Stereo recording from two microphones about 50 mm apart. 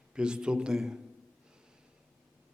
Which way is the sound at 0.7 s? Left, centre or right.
Centre.